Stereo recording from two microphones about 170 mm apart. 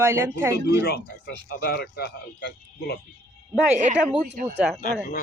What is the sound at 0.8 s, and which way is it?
Speech, 70° left (ahead or behind).